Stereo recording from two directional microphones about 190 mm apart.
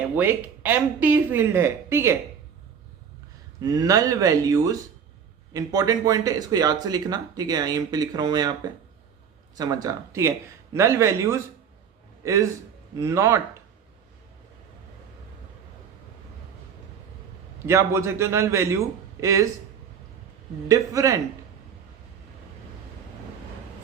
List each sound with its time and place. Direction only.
0.2 s speech: 10° right (ahead or behind)
3.6 s speech: 20° right (ahead or behind)
9.6 s a man's voice: 20° right (ahead or behind)
17.7 s speech: 15° right (ahead or behind)
20.7 s speech: 15° right (ahead or behind)